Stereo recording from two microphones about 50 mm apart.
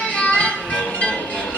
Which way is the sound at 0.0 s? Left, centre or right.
Left.